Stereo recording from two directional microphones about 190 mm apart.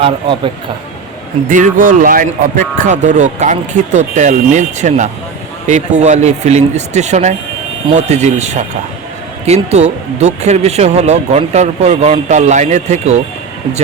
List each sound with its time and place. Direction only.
0.0 s speech: 25° right (ahead or behind)
1.5 s speech: 45° right (ahead or behind)
9.6 s speech: 35° right (ahead or behind)